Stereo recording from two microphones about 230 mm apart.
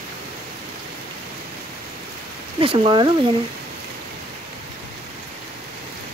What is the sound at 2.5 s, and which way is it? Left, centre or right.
Speech, right.